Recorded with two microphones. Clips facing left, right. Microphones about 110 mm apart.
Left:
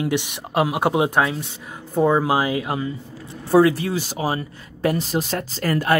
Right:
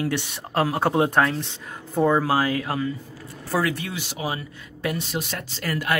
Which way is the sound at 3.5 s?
30° left (ahead or behind).